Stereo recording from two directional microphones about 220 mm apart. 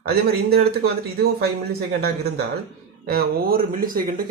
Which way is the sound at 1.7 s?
45° right (ahead or behind).